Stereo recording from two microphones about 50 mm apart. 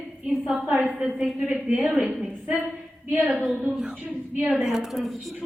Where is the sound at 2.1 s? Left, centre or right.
Right.